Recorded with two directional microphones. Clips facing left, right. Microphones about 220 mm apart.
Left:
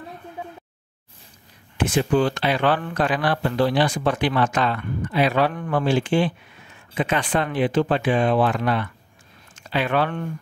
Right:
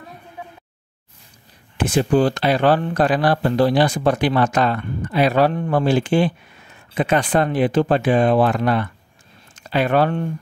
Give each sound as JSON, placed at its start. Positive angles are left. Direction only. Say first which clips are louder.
{"t": 2.0, "sound": "speech", "louder": "right 4 dB", "side_deg": -40}